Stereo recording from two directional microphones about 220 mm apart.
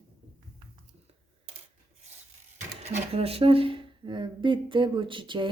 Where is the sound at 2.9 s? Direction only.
25° right (ahead or behind).